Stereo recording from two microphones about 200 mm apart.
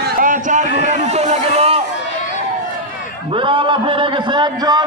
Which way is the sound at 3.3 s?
25° right (ahead or behind).